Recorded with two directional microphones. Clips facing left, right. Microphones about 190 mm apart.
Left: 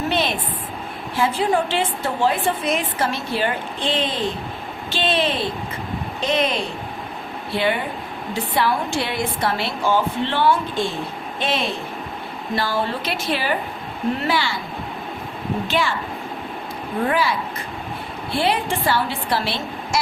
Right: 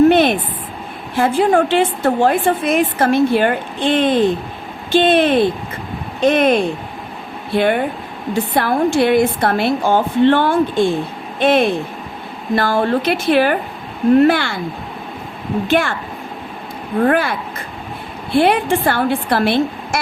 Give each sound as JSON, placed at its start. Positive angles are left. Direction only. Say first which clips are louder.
{"t": 0.1, "sound": "a sound", "louder": "right 10 dB", "side_deg": -55}
{"t": 1.1, "sound": "a woman's voice", "louder": "right 6 dB", "side_deg": -55}
{"t": 15.6, "sound": "a woman's voice", "louder": "right 7 dB", "side_deg": -55}
{"t": 17.1, "sound": "speech", "louder": "right 4 dB", "side_deg": -55}
{"t": 18.3, "sound": "a woman's voice", "louder": "right 8 dB", "side_deg": -55}